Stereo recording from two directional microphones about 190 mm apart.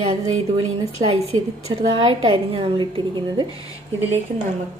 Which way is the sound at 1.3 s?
30° right (ahead or behind).